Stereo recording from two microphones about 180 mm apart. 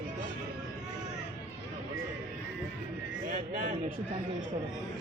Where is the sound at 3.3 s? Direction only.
50° right (ahead or behind).